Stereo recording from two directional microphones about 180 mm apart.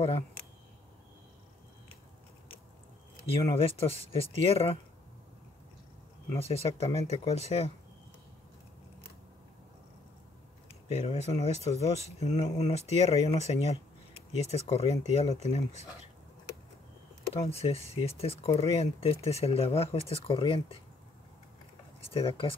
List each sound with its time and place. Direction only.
3.3 s speech: 30° left (ahead or behind)
6.3 s speech: 35° left (ahead or behind)
10.9 s speech: 35° left (ahead or behind)
17.3 s speech: 35° left (ahead or behind)
22.1 s speech: 30° left (ahead or behind)